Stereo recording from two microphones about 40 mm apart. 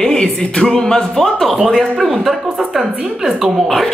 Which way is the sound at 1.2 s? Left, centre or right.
Centre.